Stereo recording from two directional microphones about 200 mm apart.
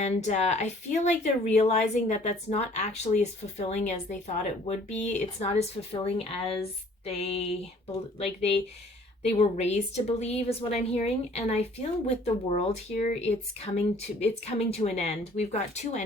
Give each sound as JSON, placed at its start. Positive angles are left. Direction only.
{"t": 0.0, "sound": "speech", "side_deg": 35}
{"t": 7.0, "sound": "a sound", "side_deg": 30}
{"t": 8.2, "sound": "speech", "side_deg": 30}